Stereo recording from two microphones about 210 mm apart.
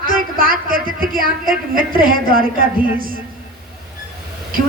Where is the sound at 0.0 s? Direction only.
40° right (ahead or behind).